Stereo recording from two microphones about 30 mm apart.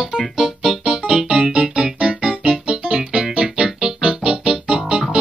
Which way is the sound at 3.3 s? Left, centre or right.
Right.